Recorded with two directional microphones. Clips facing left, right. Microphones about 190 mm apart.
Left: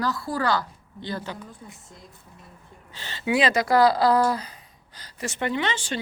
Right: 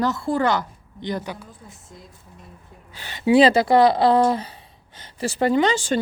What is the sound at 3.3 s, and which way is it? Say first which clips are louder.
A woman's voice: right 7 dB; 30° right (ahead or behind).